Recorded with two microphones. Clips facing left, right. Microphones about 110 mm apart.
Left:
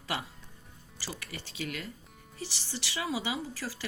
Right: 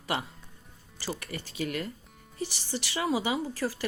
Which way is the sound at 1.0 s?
50° right (ahead or behind).